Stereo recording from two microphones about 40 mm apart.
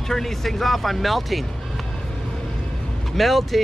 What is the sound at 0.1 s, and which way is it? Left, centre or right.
Speech, centre.